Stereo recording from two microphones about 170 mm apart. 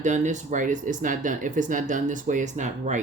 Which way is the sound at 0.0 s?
45° right (ahead or behind).